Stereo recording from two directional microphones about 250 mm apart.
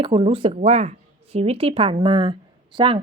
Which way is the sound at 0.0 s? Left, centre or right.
Right.